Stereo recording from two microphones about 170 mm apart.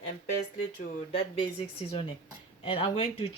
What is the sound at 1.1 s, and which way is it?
Speech, 35° left (ahead or behind).